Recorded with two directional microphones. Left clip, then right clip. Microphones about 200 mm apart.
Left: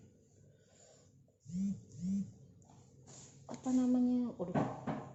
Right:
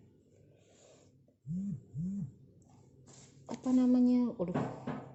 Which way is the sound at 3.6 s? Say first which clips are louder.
Right 4 dB; 40° right (ahead or behind).